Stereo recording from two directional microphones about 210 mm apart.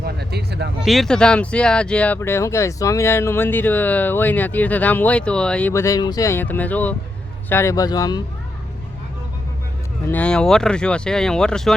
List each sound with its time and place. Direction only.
0.0 s a sound: 50° right (ahead or behind)
0.8 s speech: centre (ahead or behind); by 8.2 s 20° left (ahead or behind)
10.1 s speech: 5° left (ahead or behind)